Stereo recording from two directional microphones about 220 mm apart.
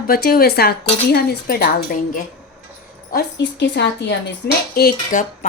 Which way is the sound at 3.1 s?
50° left (ahead or behind).